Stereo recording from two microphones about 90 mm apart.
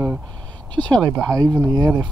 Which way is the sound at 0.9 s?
40° right (ahead or behind).